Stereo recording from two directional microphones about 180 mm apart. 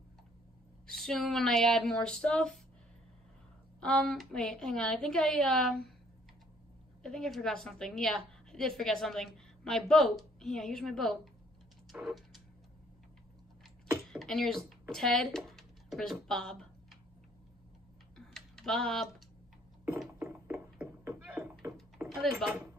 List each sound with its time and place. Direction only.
0.8 s a woman's voice: centre (ahead or behind)
3.8 s a woman's voice: 5° left (ahead or behind)
7.0 s a woman's voice: centre (ahead or behind)
11.9 s a sound: centre (ahead or behind)
14.1 s speech: centre (ahead or behind)
18.1 s typing: centre (ahead or behind)
20.2 s beatboxing: 15° right (ahead or behind)
22.1 s a woman's voice: centre (ahead or behind)